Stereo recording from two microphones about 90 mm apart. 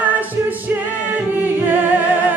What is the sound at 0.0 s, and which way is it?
A capella, 20° right (ahead or behind).